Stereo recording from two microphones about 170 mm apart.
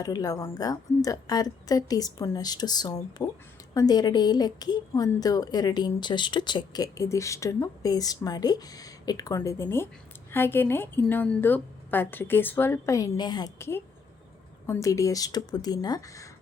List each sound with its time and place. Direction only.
0.0 s a woman's voice: 20° left (ahead or behind)